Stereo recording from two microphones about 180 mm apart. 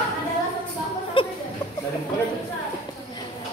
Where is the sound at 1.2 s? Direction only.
30° left (ahead or behind).